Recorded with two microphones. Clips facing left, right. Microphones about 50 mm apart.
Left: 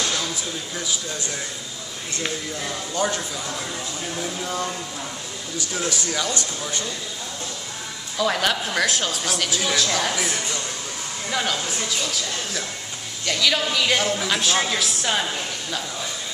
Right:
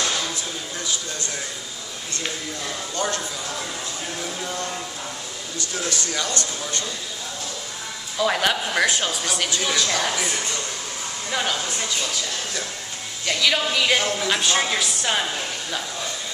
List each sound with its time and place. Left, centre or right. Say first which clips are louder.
2.2 s speech: left 2 dB; centre
5.8 s speech: left 1 dB; centre
8.2 s speech: right 1 dB; centre